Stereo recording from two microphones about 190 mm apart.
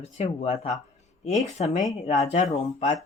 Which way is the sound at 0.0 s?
30° left (ahead or behind).